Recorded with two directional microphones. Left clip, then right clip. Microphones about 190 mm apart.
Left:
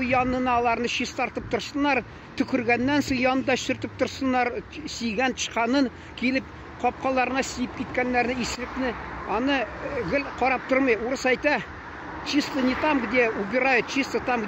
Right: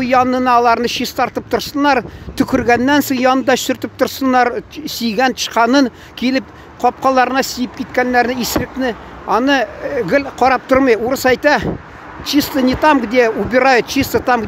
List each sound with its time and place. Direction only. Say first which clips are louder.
0.0 s speech: right 11 dB; 40° right (ahead or behind)